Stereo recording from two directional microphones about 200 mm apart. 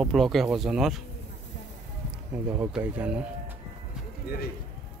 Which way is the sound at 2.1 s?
5° right (ahead or behind).